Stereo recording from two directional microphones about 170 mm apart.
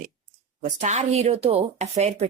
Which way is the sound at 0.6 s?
45° right (ahead or behind).